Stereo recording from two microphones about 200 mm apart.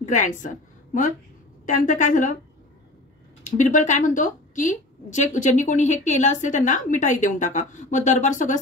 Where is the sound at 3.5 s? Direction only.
40° left (ahead or behind).